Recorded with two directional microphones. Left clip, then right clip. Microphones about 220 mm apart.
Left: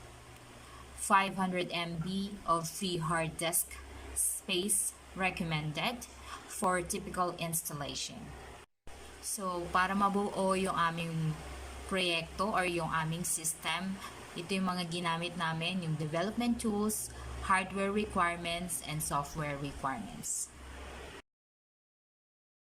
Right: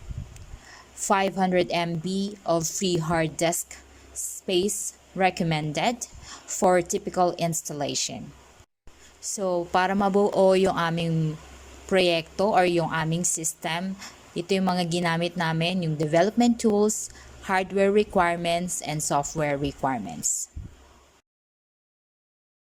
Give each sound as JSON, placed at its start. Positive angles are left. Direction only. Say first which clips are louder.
{"t": 1.0, "sound": "a woman's voice", "louder": "right 6 dB", "side_deg": -35}
{"t": 9.2, "sound": "a woman's voice", "louder": "right 11 dB", "side_deg": -35}